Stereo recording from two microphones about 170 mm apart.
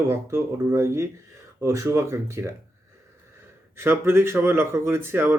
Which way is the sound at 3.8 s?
15° right (ahead or behind).